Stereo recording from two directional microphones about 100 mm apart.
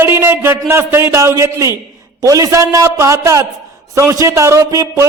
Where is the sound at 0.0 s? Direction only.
25° right (ahead or behind).